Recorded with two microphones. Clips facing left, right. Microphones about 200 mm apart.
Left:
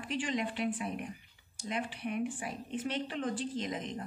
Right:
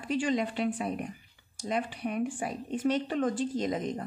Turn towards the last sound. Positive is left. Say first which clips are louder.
# right 6 dB
turn(degrees=-45)  # may be behind; listen again after turning